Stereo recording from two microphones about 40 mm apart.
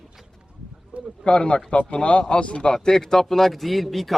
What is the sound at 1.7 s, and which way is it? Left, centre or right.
A man's voice, left.